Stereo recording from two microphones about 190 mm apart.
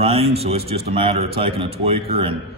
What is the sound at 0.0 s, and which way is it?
A man's voice, 30° right (ahead or behind).